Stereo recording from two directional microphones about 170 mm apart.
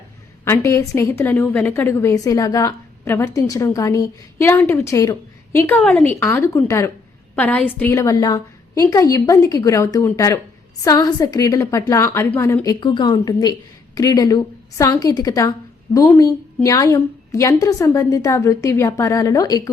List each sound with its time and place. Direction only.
0.4 s a woman's voice: 15° left (ahead or behind)
12.8 s a woman's voice: 25° left (ahead or behind)